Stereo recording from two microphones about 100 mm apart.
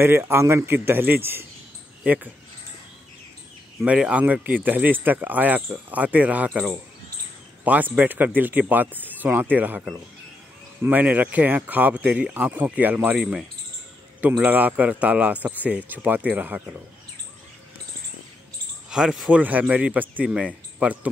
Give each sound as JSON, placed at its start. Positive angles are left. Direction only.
{"t": 0.0, "sound": "speech", "side_deg": -25}
{"t": 3.8, "sound": "speech", "side_deg": -10}
{"t": 18.9, "sound": "speech", "side_deg": -5}
{"t": 19.4, "sound": "speech", "side_deg": -15}